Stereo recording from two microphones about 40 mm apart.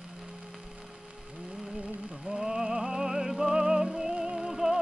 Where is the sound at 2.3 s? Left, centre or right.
Centre.